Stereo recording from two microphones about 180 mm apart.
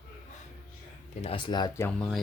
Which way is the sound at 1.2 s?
30° left (ahead or behind).